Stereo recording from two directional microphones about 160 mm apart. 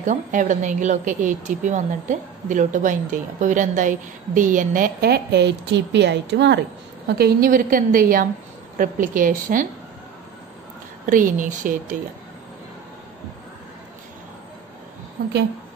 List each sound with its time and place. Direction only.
0.0 s a woman's voice: 50° right (ahead or behind); by 6.6 s 90° right
7.2 s a woman's voice: 75° right (ahead or behind); by 9.7 s 55° right (ahead or behind)
11.1 s a woman's voice: 55° right (ahead or behind)